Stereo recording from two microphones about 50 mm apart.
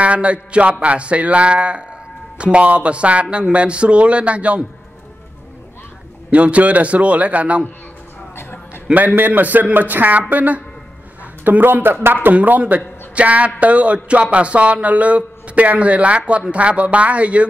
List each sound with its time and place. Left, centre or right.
0.0 s speech: right
6.3 s speech: right
8.4 s a sound: left
8.9 s a man's voice: right